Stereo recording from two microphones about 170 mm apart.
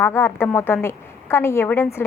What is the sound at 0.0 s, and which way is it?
A woman's voice, 15° left (ahead or behind).